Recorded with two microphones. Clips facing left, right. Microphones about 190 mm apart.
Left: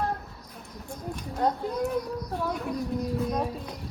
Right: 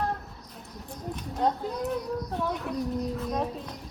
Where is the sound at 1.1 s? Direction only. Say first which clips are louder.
Even; centre (ahead or behind).